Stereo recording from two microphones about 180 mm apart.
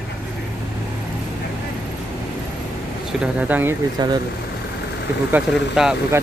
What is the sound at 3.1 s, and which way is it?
Speech, 5° right (ahead or behind).